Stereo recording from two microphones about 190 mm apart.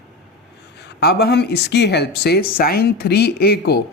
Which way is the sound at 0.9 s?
55° left (ahead or behind).